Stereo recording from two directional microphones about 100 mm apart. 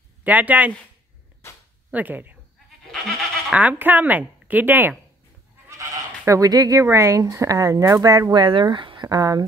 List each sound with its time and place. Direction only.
0.2 s speech: 15° right (ahead or behind)
1.9 s speech: 15° right (ahead or behind)
2.9 s goat: centre (ahead or behind)
3.5 s speech: 15° right (ahead or behind)
5.7 s speech: 30° right (ahead or behind)